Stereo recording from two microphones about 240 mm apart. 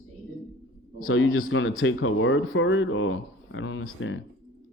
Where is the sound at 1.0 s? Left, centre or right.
Left.